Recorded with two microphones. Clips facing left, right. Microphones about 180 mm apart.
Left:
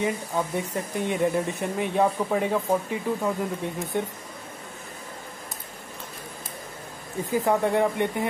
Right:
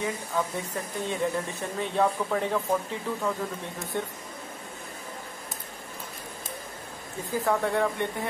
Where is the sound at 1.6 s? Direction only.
15° left (ahead or behind).